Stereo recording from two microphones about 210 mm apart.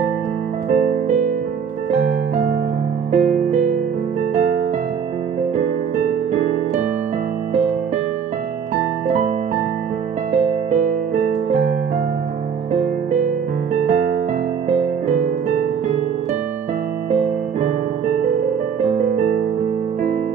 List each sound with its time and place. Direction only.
3.1 s music: 35° right (ahead or behind)
17.1 s piano: 30° right (ahead or behind)